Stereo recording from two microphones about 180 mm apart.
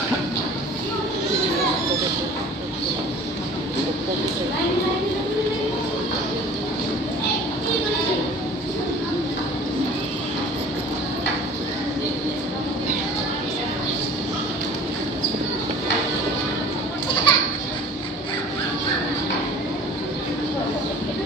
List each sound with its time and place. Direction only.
17.3 s children playing: 25° left (ahead or behind)